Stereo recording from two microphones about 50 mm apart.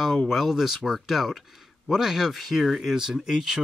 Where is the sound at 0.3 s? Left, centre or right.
Centre.